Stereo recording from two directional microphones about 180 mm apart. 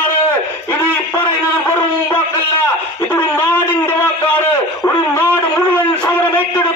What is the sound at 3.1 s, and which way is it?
A man's voice, 10° left (ahead or behind).